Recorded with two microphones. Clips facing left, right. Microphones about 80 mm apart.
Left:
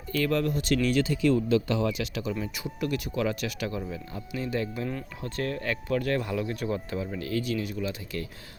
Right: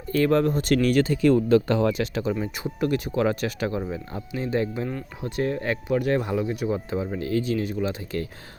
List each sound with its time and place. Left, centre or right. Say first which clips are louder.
0.1 s speech: right 6 dB; right